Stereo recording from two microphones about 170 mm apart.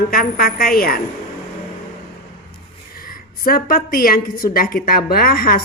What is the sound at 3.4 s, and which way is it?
A woman's voice, 60° left (ahead or behind).